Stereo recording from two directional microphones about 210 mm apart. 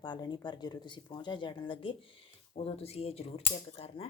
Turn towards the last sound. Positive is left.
turn(degrees=30)  # may be behind; listen again after turning